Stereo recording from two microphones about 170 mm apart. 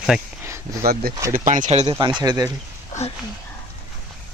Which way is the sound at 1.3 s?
50° right (ahead or behind).